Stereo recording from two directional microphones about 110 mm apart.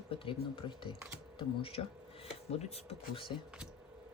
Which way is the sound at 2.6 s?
70° left (ahead or behind).